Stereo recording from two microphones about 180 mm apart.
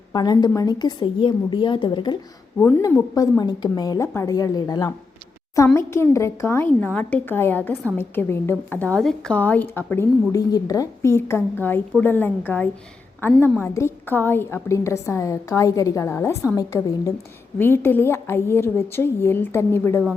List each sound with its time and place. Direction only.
0.1 s a woman's voice: 25° left (ahead or behind)